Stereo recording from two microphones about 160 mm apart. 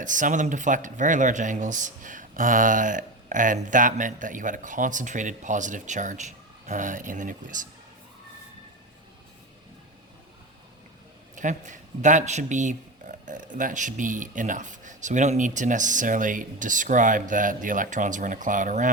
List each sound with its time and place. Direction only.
0.0 s speech: 55° right (ahead or behind)
11.3 s speech: 50° right (ahead or behind)